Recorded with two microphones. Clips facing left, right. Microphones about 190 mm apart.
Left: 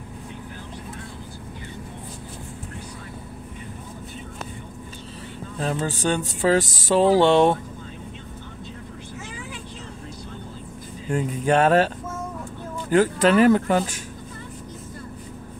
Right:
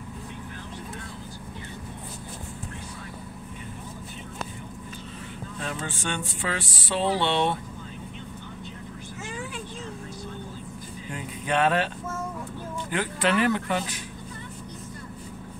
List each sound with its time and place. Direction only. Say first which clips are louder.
5.6 s speech: left 9 dB; 35° left (ahead or behind)
11.1 s speech: left 9 dB; 45° left (ahead or behind)
12.9 s speech: left 8 dB; 40° left (ahead or behind)